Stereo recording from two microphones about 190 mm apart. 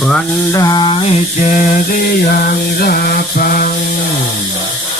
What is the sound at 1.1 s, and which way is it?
Mantra, 40° left (ahead or behind).